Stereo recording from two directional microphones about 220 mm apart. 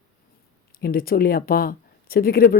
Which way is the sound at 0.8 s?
40° left (ahead or behind).